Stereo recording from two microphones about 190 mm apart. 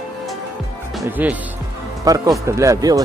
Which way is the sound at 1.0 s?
10° right (ahead or behind).